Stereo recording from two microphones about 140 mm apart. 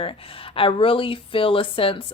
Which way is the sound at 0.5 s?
40° left (ahead or behind).